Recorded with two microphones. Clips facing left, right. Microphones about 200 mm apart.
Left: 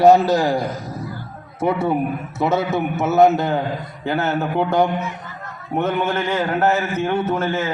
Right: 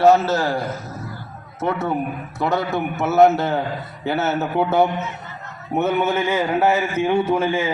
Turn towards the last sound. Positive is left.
turn(degrees=-10)  # may be behind; listen again after turning